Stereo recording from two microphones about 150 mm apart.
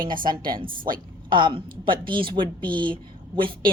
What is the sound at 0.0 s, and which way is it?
A woman's voice, 70° right (ahead or behind).